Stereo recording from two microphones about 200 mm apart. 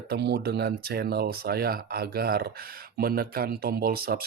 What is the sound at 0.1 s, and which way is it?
Speech, 55° right (ahead or behind).